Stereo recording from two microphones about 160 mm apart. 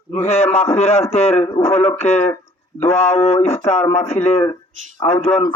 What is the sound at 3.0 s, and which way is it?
A man's voice, 45° left (ahead or behind).